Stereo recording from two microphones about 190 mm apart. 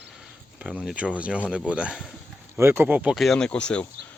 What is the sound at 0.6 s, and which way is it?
Speech, 5° right (ahead or behind).